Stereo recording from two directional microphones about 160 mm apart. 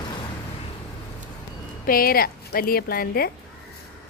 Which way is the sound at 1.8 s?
65° left (ahead or behind).